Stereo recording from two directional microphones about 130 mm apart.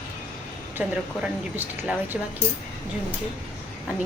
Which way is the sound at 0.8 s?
15° right (ahead or behind).